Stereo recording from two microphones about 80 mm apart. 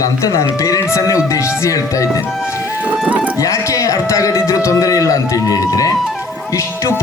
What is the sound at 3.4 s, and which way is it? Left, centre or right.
A man's voice, left.